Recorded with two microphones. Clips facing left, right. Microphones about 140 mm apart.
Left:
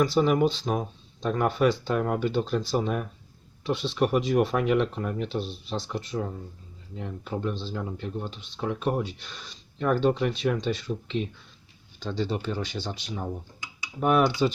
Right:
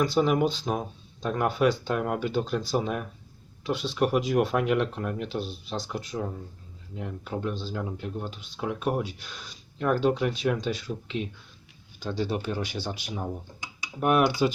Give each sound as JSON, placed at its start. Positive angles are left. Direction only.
{"t": 0.0, "sound": "speech", "side_deg": 0}